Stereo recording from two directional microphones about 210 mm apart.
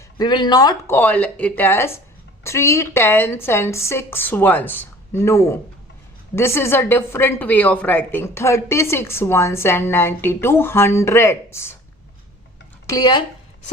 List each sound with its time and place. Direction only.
0.2 s a woman's voice: 20° left (ahead or behind)
12.9 s speech: 20° left (ahead or behind)